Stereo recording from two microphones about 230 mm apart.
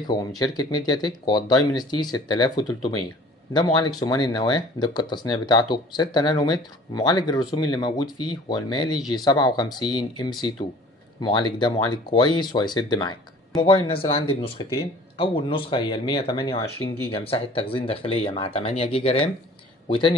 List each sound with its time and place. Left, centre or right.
0.0 s speech: centre